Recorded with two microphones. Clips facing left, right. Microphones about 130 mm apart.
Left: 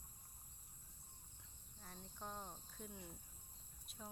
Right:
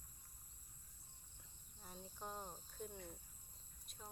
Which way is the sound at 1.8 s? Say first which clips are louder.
Right 1 dB; 5° right (ahead or behind).